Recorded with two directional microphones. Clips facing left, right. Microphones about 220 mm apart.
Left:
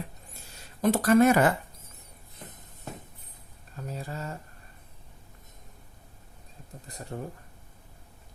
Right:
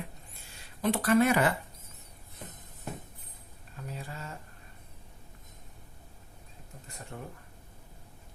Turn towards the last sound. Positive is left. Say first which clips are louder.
# left 6 dB
turn(degrees=40)  # may be behind; listen again after turning